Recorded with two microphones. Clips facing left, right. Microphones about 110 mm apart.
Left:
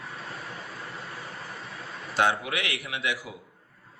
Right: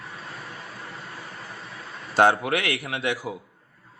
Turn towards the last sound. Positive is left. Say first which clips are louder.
# right 4 dB
turn(degrees=-45)  # may be behind; listen again after turning